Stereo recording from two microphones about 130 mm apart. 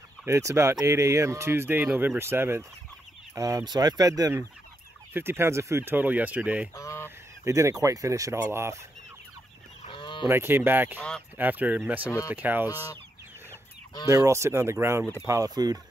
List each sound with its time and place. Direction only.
0.2 s speech: 25° right (ahead or behind)
5.1 s speech: 20° right (ahead or behind)
6.7 s speech: 25° left (ahead or behind)
7.4 s speech: 25° right (ahead or behind)
9.8 s fowl: 40° left (ahead or behind)
10.2 s speech: 15° right (ahead or behind)
11.0 s speech: 5° left (ahead or behind)
11.3 s speech: 15° right (ahead or behind)
14.0 s speech: 25° right (ahead or behind)